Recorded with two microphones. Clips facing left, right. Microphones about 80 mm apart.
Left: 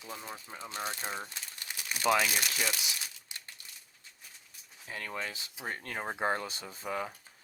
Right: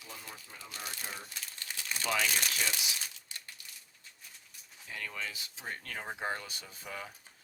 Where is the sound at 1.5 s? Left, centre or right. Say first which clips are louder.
Even; centre.